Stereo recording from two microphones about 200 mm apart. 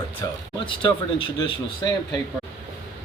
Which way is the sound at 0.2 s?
15° left (ahead or behind).